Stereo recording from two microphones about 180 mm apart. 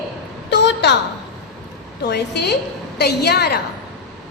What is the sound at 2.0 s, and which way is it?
A woman's voice, 70° left (ahead or behind).